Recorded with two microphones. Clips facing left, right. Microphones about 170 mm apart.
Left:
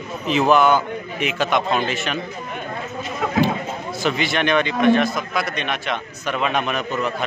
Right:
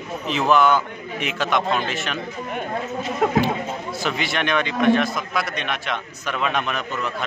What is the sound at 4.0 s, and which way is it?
A man's voice, centre (ahead or behind).